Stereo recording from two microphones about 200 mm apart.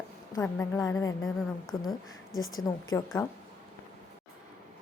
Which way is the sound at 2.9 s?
15° left (ahead or behind).